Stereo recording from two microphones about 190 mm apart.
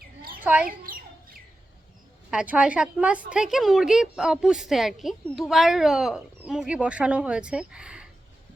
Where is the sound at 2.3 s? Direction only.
5° right (ahead or behind).